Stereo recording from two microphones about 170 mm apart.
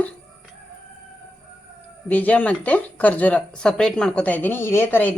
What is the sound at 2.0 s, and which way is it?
Speech, 10° left (ahead or behind).